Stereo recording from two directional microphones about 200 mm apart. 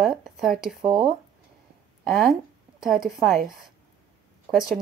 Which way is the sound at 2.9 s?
45° right (ahead or behind).